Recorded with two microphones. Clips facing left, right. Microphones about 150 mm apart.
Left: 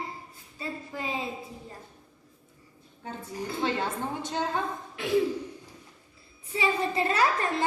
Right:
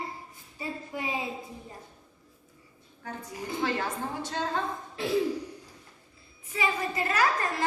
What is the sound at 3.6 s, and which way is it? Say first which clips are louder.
A woman's voice: left 1 dB; 20° left (ahead or behind).